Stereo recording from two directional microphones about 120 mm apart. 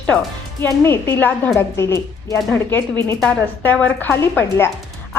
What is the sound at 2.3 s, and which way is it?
Speech, 10° left (ahead or behind).